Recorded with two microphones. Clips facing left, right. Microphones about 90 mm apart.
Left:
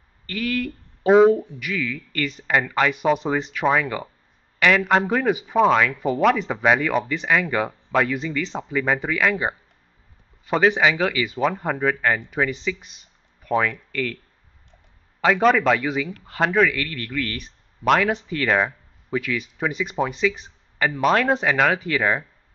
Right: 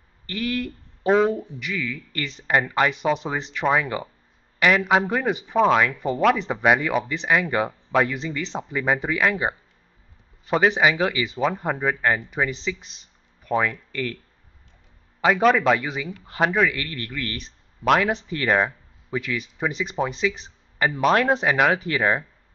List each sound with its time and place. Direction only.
0.3 s speech: 5° right (ahead or behind)
2.4 s speech: 10° right (ahead or behind)
3.0 s speech: centre (ahead or behind)
15.1 s speech: 5° right (ahead or behind)